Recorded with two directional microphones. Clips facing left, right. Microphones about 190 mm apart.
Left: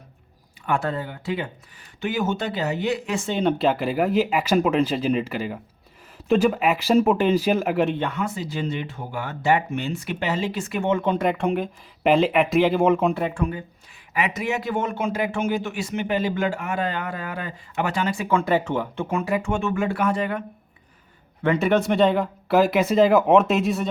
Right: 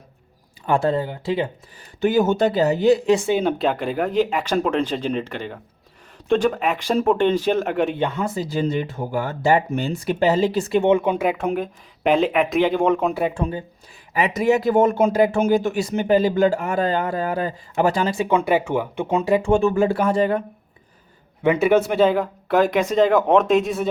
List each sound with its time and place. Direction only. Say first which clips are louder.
0.7 s speech: right 5 dB; 30° right (ahead or behind)
2.0 s speech: right 7 dB; 40° right (ahead or behind)
3.2 s speech: right 1 dB; 5° right (ahead or behind)
8.1 s speech: right 4 dB; 35° right (ahead or behind)
10.8 s speech: right 1 dB; 10° right (ahead or behind)
13.3 s speech: right 1 dB; 30° right (ahead or behind); by 19.2 s 15° right (ahead or behind)
19.3 s speech: right 10 dB; 30° right (ahead or behind)
21.4 s speech: right 3 dB; 10° right (ahead or behind)